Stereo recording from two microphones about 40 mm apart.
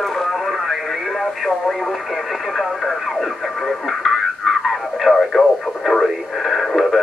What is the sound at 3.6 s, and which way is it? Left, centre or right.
Radio, centre.